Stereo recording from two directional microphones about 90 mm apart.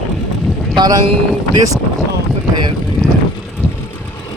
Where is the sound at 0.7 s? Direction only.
50° right (ahead or behind).